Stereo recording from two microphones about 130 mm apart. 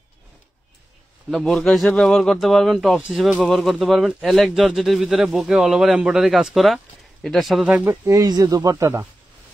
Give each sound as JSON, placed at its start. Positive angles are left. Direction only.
{"t": 1.3, "sound": "speech", "side_deg": 5}
{"t": 7.7, "sound": "speech", "side_deg": -10}
{"t": 8.0, "sound": "speech", "side_deg": -25}